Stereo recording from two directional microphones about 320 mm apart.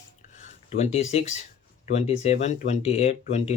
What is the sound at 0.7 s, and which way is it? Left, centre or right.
Speech, left.